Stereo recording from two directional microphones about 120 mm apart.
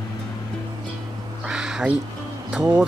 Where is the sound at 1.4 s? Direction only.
5° right (ahead or behind).